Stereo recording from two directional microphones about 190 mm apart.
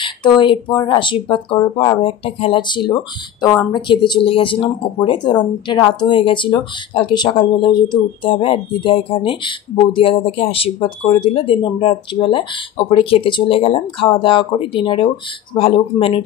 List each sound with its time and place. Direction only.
0.0 s speech: 25° left (ahead or behind)